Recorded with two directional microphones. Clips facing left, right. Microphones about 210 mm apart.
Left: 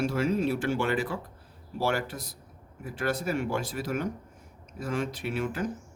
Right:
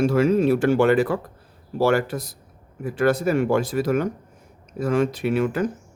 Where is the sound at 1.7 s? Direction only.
80° right.